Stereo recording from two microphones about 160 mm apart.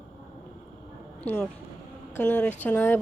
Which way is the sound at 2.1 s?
10° left (ahead or behind).